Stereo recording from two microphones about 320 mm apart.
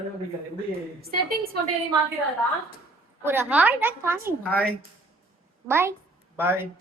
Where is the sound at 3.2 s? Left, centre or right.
Centre.